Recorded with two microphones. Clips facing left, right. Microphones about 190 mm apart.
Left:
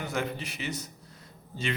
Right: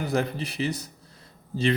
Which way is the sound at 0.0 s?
35° right (ahead or behind).